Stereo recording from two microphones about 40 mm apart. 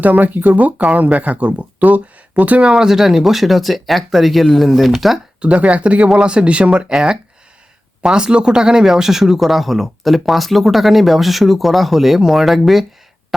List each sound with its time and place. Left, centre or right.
0.0 s speech: right
0.8 s speech: right
2.6 s speech: centre
5.4 s speech: right; by 12.8 s centre